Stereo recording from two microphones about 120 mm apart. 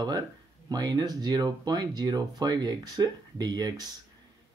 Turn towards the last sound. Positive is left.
turn(degrees=-35)  # may be behind; listen again after turning